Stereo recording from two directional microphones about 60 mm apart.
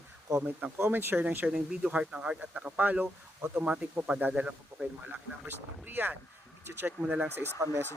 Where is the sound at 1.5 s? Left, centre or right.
Centre.